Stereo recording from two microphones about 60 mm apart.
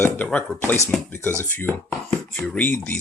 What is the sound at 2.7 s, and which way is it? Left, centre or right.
Speech, left.